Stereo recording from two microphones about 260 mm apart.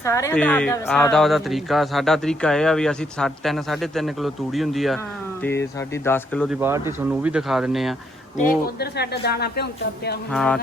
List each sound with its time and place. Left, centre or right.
0.0 s speech: centre
6.6 s speech: centre
8.4 s speech: left
10.3 s speech: centre